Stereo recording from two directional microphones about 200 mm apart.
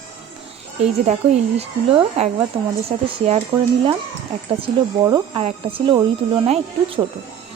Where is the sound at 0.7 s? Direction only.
30° right (ahead or behind).